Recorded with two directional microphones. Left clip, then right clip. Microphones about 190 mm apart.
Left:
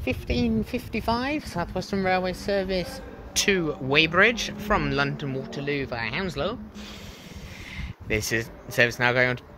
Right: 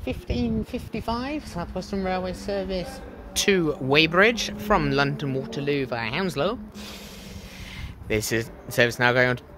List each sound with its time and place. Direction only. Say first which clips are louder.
0.3 s speech: left 1 dB; 20° left (ahead or behind)
3.4 s speech: right 3 dB; 30° right (ahead or behind)
8.1 s speech: right 1 dB; 25° right (ahead or behind)